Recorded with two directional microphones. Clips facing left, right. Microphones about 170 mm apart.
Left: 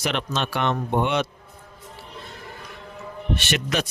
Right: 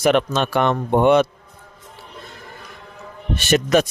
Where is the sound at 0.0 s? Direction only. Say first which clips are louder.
Right 9 dB; 50° right (ahead or behind).